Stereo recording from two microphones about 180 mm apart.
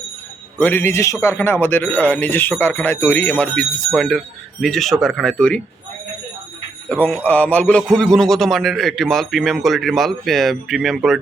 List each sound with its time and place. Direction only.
0.6 s a man's voice: 10° left (ahead or behind)
6.8 s a man's voice: 10° left (ahead or behind)